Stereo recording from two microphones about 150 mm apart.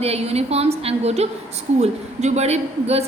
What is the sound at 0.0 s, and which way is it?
A woman's voice, 45° right (ahead or behind).